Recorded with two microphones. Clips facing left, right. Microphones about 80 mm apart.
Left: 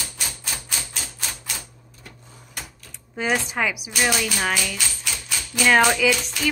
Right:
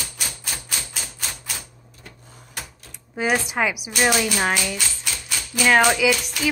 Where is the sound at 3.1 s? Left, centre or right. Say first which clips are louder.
Right 2 dB; centre.